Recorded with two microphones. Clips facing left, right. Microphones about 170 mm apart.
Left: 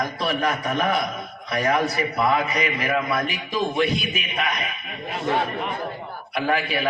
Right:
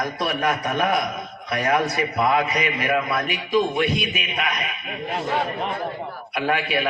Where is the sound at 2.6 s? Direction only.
35° left (ahead or behind).